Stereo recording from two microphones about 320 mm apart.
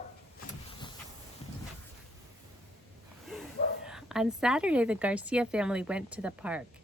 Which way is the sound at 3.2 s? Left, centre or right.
Centre.